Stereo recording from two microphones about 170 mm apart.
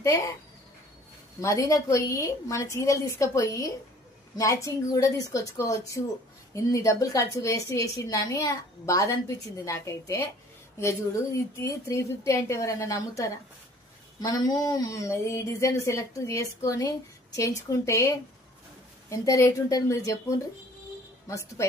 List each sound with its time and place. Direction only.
1.4 s a woman's voice: 20° left (ahead or behind)
11.6 s a woman's voice: 15° left (ahead or behind)